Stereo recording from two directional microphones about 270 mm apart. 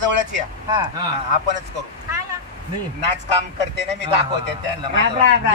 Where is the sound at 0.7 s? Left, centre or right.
Centre.